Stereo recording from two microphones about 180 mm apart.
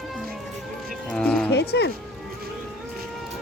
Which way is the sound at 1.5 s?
65° left (ahead or behind).